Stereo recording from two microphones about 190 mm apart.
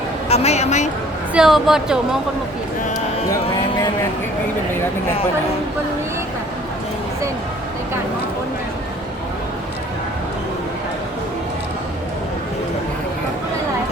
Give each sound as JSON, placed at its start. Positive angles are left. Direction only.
{"t": 0.3, "sound": "a woman's voice", "side_deg": 35}
{"t": 1.3, "sound": "a woman's voice", "side_deg": -5}